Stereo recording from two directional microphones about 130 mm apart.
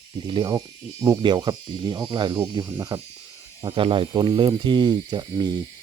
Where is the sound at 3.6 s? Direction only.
45° right (ahead or behind).